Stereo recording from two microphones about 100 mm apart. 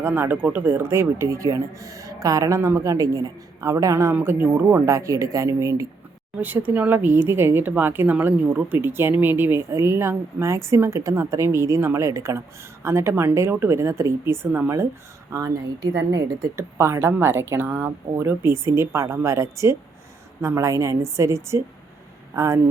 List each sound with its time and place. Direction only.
0.0 s speech: 20° right (ahead or behind)
6.4 s speech: 20° right (ahead or behind)